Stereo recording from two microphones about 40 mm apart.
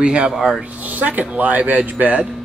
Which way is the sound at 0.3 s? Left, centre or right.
Centre.